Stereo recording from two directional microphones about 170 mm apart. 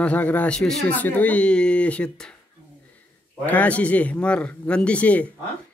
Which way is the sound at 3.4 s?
10° left (ahead or behind).